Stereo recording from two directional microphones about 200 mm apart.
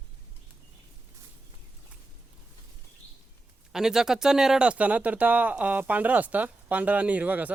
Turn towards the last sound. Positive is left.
turn(degrees=-5)  # may be behind; listen again after turning